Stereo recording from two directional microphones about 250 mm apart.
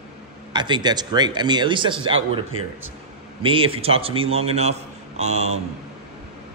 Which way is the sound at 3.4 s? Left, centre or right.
Right.